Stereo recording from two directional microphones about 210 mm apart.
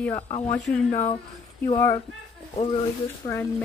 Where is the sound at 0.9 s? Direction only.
35° left (ahead or behind).